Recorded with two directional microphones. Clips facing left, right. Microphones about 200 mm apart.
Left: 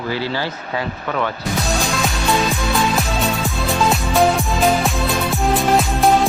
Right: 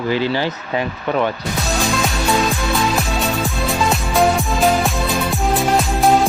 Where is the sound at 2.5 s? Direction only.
Centre (ahead or behind).